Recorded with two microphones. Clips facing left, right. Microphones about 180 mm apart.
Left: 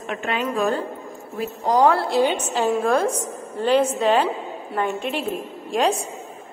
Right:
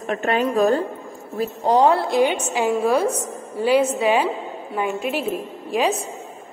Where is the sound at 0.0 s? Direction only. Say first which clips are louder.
Right 5 dB; 40° right (ahead or behind).